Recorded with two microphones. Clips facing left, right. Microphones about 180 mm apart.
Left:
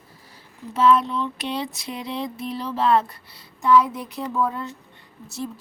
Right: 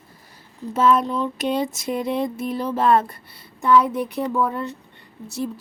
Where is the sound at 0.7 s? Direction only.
45° right (ahead or behind); by 4.2 s 60° right (ahead or behind).